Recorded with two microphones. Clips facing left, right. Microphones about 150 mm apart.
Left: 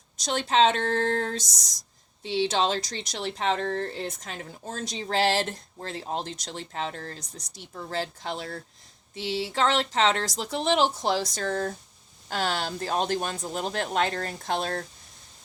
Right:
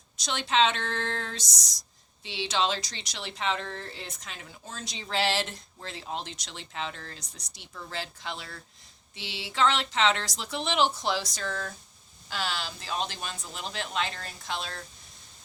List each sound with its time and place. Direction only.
0.2 s speech: 45° left (ahead or behind)